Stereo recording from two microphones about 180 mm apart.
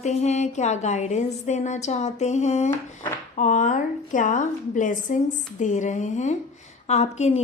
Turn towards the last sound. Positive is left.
turn(degrees=40)  # may be behind; listen again after turning